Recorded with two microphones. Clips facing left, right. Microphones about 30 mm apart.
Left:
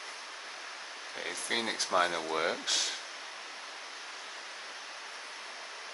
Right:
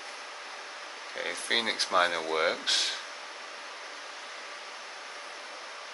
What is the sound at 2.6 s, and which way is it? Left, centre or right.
Speech, right.